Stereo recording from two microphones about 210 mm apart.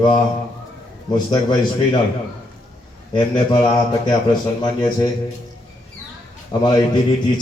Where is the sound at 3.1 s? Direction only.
20° left (ahead or behind).